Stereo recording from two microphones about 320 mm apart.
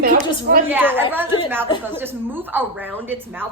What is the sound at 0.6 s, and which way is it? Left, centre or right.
A woman's voice, centre.